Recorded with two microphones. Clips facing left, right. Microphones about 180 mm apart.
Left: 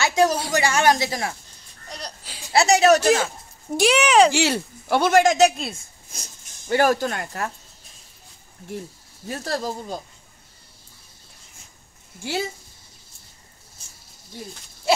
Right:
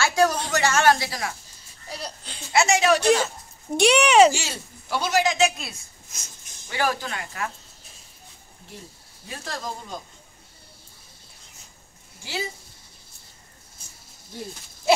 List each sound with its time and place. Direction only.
0.0 s a sound: 20° left (ahead or behind)
0.4 s speech: 10° left (ahead or behind)
1.9 s a sound: 5° right (ahead or behind)
2.5 s speech: 35° left (ahead or behind)
3.0 s speech: 5° left (ahead or behind)
4.3 s speech: 65° left (ahead or behind); by 5.5 s 45° left (ahead or behind)
6.1 s speech: 30° left (ahead or behind)
6.7 s speech: 45° left (ahead or behind)
9.3 s speech: 40° left (ahead or behind)
12.2 s speech: 50° left (ahead or behind)